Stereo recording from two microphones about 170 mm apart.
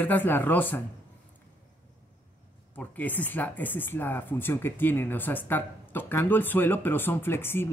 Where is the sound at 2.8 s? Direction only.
10° left (ahead or behind).